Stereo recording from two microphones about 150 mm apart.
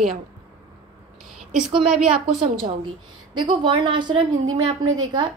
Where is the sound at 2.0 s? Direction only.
40° right (ahead or behind).